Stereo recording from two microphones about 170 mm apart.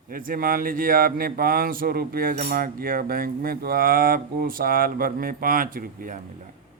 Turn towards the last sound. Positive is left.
turn(degrees=-55)  # may be behind; listen again after turning